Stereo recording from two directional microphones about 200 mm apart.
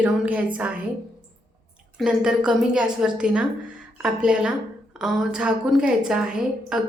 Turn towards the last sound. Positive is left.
turn(degrees=-5)  # may be behind; listen again after turning